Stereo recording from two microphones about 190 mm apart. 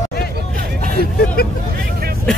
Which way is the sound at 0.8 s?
55° left (ahead or behind).